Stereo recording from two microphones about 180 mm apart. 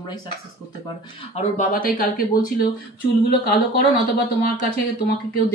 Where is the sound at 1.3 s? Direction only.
45° left (ahead or behind).